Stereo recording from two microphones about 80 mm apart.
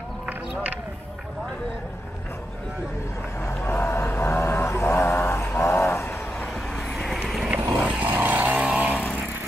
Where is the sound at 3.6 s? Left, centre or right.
Left.